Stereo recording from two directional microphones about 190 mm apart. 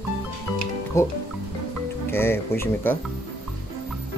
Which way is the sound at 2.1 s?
10° left (ahead or behind).